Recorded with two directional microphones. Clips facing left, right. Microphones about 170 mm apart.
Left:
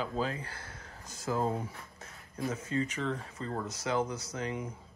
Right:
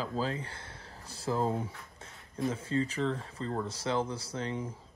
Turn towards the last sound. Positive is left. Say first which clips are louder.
# right 1 dB
turn(degrees=-30)  # may be behind; listen again after turning